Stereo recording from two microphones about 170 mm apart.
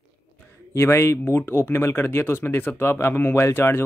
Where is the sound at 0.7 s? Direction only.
15° left (ahead or behind).